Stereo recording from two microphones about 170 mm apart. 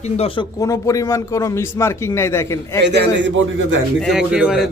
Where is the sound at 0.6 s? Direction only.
20° left (ahead or behind).